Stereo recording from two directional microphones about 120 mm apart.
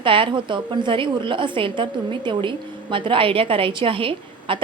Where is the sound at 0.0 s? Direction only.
45° right (ahead or behind).